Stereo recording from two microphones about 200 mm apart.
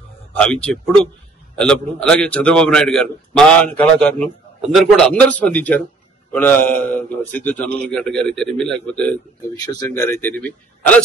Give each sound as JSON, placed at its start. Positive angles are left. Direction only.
{"t": 0.4, "sound": "a man's voice", "side_deg": 5}
{"t": 9.6, "sound": "a man's voice", "side_deg": 20}